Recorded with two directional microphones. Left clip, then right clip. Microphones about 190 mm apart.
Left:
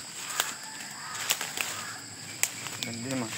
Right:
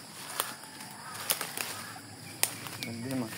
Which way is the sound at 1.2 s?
25° left (ahead or behind).